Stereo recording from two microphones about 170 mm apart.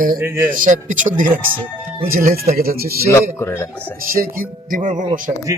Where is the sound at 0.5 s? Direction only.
50° right (ahead or behind).